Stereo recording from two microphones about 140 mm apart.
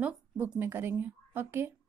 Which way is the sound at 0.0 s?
10° right (ahead or behind).